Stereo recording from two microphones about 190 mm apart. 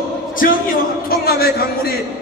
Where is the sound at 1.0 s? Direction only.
55° left (ahead or behind).